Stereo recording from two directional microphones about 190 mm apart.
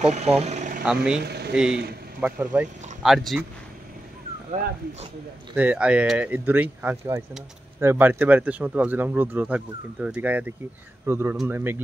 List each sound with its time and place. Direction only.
0.0 s speech: 35° right (ahead or behind)
1.2 s a sound: 60° right (ahead or behind)
1.5 s speech: 5° right (ahead or behind)
5.6 s speech: 5° right (ahead or behind)